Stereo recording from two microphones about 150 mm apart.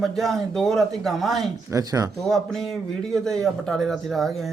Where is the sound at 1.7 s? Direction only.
25° right (ahead or behind).